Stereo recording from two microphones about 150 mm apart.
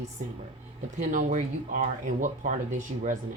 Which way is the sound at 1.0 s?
55° right (ahead or behind).